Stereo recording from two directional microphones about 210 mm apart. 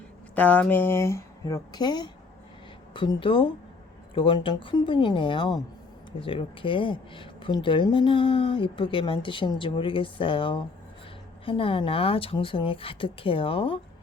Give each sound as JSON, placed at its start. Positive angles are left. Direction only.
{"t": 0.3, "sound": "speech", "side_deg": 5}